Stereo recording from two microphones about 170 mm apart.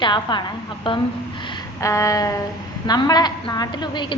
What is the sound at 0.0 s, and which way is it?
A woman's voice, 25° left (ahead or behind).